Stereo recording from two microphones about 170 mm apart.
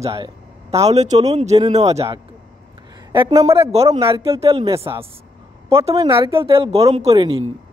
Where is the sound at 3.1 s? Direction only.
30° right (ahead or behind).